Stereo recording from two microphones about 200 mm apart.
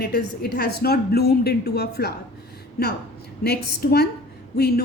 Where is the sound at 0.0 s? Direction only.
50° left (ahead or behind).